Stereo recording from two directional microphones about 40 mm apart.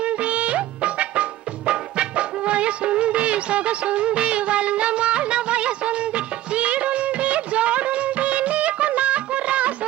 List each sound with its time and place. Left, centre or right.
0.0 s music: right